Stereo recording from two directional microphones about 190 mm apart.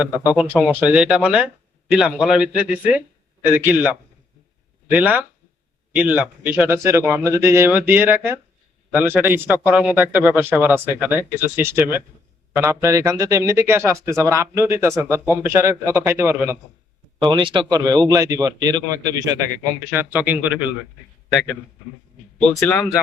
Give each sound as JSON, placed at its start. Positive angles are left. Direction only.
{"t": 0.2, "sound": "a man's voice", "side_deg": -10}
{"t": 17.2, "sound": "speech", "side_deg": -25}
{"t": 21.3, "sound": "a man's voice", "side_deg": 5}